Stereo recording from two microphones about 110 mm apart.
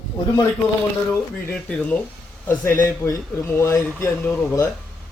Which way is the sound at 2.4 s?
20° left (ahead or behind).